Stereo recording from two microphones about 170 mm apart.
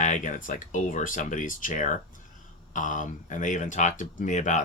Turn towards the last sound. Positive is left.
turn(degrees=45)  # may be behind; listen again after turning